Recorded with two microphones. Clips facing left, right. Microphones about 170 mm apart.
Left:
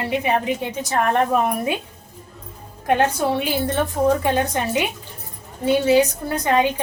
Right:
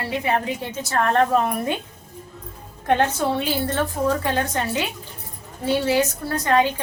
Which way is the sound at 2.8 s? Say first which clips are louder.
Left 1 dB; 10° left (ahead or behind).